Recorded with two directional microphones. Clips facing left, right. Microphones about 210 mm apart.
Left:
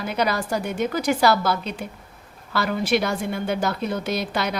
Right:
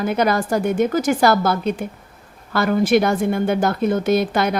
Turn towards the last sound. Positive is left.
turn(degrees=-50)  # may be behind; listen again after turning